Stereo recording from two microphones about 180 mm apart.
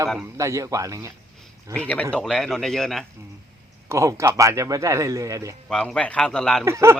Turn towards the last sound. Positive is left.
turn(degrees=-15)  # may be behind; listen again after turning